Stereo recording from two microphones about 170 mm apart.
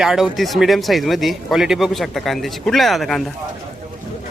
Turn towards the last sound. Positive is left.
turn(degrees=0)  # may be behind; listen again after turning